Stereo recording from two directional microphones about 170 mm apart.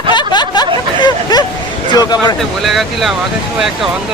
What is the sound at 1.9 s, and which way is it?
Speech, 25° left (ahead or behind).